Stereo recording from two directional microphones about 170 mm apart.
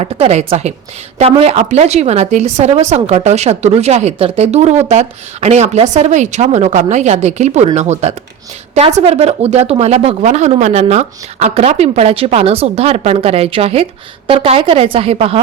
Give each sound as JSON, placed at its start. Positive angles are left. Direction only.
{"t": 0.0, "sound": "a woman's voice", "side_deg": -40}